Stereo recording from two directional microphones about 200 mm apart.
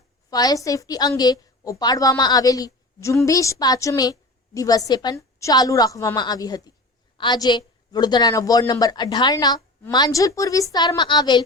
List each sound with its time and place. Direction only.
0.3 s a woman's voice: 20° left (ahead or behind)